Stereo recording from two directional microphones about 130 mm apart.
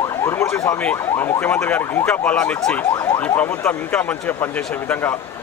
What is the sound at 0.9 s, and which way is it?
A man's voice, 15° left (ahead or behind).